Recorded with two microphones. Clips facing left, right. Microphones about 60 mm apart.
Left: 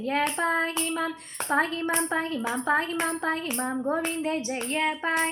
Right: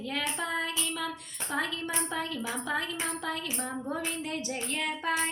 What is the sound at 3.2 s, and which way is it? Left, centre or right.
Speech, left.